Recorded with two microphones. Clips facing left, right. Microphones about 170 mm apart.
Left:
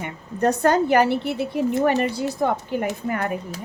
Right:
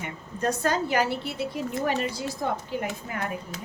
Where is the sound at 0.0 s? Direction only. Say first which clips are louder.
Left 7 dB; 60° left (ahead or behind).